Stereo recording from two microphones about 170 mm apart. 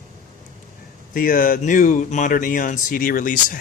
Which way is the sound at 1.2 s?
55° left (ahead or behind).